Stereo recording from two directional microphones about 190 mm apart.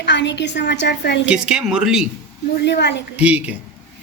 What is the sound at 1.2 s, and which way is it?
Speech, 5° right (ahead or behind).